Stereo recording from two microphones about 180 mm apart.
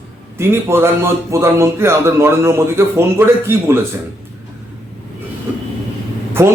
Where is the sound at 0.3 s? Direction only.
15° right (ahead or behind).